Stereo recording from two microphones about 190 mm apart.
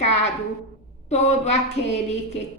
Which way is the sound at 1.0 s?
35° left (ahead or behind).